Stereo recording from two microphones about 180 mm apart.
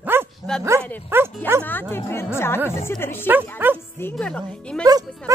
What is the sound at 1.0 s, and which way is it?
Speech, 10° right (ahead or behind).